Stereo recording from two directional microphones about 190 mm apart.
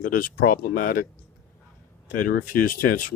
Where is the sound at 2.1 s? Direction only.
45° left (ahead or behind).